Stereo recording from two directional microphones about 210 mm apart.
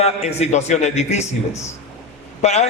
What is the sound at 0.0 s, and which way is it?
A man's voice, 30° left (ahead or behind).